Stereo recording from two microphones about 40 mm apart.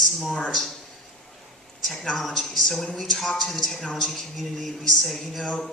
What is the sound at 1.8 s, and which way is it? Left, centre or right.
A man's voice, centre.